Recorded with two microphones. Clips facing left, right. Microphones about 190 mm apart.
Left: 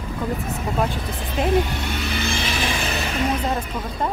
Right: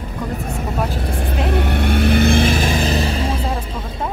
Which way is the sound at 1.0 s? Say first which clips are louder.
Right 2 dB; 55° right (ahead or behind).